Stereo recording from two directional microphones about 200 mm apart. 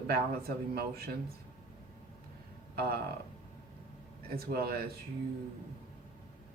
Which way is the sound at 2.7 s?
50° right (ahead or behind).